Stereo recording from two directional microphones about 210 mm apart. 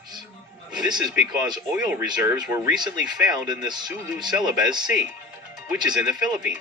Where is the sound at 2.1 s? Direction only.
20° right (ahead or behind).